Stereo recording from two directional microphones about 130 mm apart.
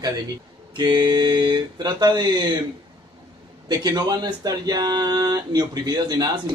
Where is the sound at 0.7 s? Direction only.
35° right (ahead or behind).